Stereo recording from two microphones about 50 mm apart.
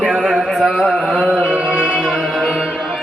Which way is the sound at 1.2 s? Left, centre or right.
Centre.